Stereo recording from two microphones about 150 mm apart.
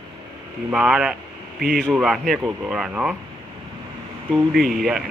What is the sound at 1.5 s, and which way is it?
Speech, 80° right.